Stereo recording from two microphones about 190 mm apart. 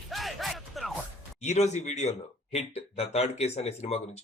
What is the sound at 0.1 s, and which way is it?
Music, centre (ahead or behind).